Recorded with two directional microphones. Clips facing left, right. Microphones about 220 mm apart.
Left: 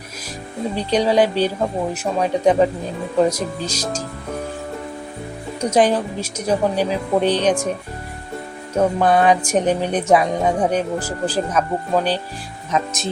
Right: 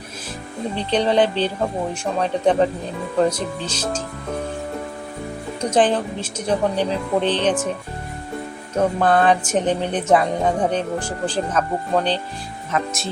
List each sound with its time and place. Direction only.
0.8 s speech: 10° left (ahead or behind)
5.5 s speech: 10° left (ahead or behind)
8.7 s speech: 10° left (ahead or behind)